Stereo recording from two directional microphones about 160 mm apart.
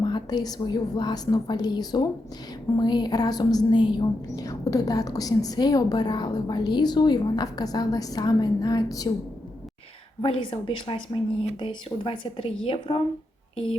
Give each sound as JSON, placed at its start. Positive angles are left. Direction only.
{"t": 0.0, "sound": "a woman's voice", "side_deg": 25}
{"t": 10.2, "sound": "a woman's voice", "side_deg": 30}